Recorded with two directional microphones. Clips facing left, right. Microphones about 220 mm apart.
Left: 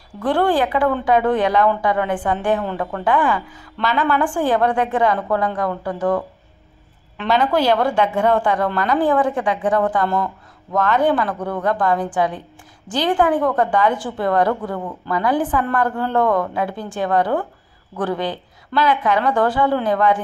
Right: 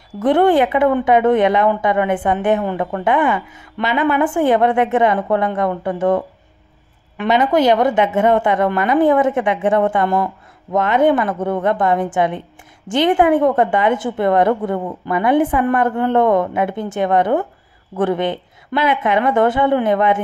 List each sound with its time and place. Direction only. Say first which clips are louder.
0.2 s a woman's voice: right 5 dB; 20° right (ahead or behind)
8.7 s a woman's voice: right 4 dB; 5° right (ahead or behind)
9.0 s a woman's voice: right 4 dB; 20° right (ahead or behind)